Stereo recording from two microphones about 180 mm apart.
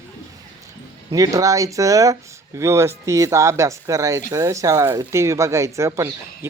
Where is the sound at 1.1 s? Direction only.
20° right (ahead or behind).